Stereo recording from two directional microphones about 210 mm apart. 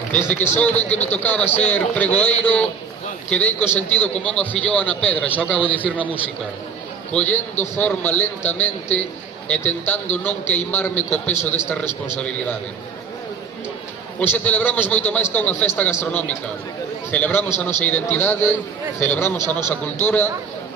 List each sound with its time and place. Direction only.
0.4 s a man's voice: 10° left (ahead or behind)
7.1 s a man's voice: 5° left (ahead or behind)
7.3 s a man's voice: 35° left (ahead or behind)
7.8 s a man's voice: 10° left (ahead or behind)
14.2 s a man's voice: 5° left (ahead or behind)